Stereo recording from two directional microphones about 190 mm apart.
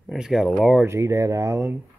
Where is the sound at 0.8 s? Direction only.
15° right (ahead or behind).